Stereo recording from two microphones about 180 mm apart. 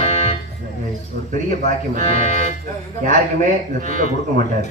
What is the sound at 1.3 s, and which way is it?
Speech, 45° right (ahead or behind).